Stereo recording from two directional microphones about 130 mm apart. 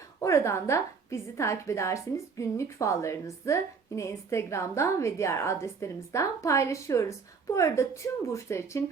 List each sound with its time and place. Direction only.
0.2 s a woman's voice: 20° left (ahead or behind)